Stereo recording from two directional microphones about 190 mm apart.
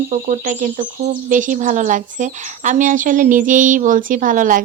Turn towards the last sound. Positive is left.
turn(degrees=-45)  # may be behind; listen again after turning